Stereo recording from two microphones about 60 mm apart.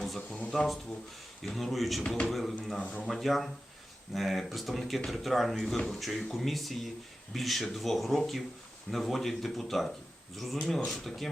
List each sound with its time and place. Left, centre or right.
0.0 s a sound: centre
0.5 s speech: centre
2.0 s speech: centre
2.3 s speech: centre
2.8 s speech: left
3.1 s speech: centre